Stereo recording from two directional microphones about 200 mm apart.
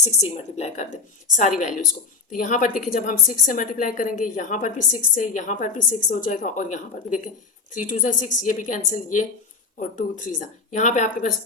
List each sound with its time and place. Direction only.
0.0 s a woman's voice: 35° left (ahead or behind)
10.7 s a woman's voice: 35° left (ahead or behind)